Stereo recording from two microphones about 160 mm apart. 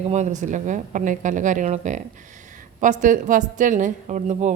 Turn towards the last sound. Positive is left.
turn(degrees=-50)  # may be behind; listen again after turning